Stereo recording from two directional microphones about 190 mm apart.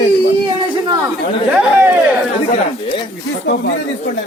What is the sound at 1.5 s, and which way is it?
Speech, 10° right (ahead or behind).